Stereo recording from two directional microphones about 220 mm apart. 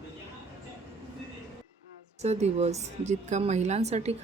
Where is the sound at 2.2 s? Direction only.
30° right (ahead or behind).